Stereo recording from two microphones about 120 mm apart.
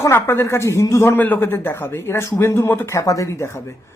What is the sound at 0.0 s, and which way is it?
A man's voice, 20° left (ahead or behind).